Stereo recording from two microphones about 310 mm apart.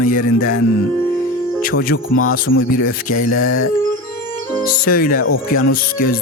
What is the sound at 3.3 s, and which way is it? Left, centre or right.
Speech, left.